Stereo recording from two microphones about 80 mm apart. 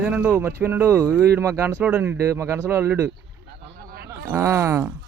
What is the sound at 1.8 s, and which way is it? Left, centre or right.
Speech, centre.